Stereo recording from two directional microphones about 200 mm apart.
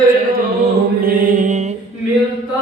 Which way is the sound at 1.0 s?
45° right (ahead or behind).